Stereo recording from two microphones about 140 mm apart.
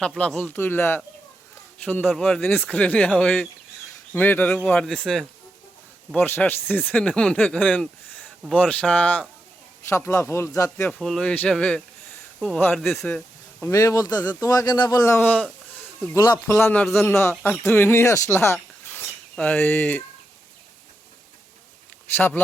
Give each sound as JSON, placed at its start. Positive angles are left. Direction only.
{"t": 0.2, "sound": "speech", "side_deg": 10}
{"t": 10.9, "sound": "speech", "side_deg": 5}
{"t": 13.7, "sound": "speech", "side_deg": 20}
{"t": 16.1, "sound": "speech", "side_deg": 25}
{"t": 16.5, "sound": "speech", "side_deg": 15}
{"t": 16.8, "sound": "speech", "side_deg": 0}
{"t": 17.1, "sound": "speech", "side_deg": 20}